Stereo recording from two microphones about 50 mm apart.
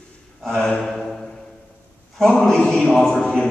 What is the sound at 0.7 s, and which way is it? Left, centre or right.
Speech, centre.